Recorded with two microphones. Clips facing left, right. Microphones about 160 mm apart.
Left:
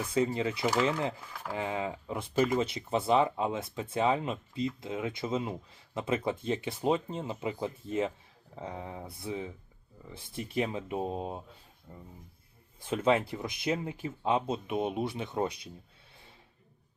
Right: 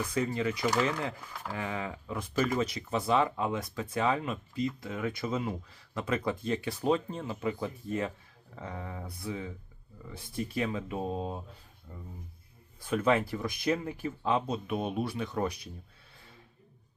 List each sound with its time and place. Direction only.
0.1 s speech: 25° left (ahead or behind)
12.8 s speech: 25° left (ahead or behind)